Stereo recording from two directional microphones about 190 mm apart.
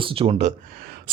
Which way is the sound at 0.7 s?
50° right (ahead or behind).